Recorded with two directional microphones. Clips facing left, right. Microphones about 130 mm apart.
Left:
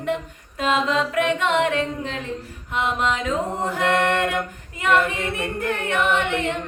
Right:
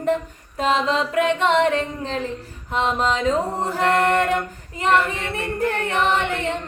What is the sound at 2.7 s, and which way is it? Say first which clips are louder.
Music: right 2 dB; 35° right (ahead or behind).